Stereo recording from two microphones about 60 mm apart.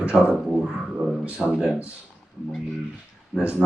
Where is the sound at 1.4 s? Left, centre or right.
Centre.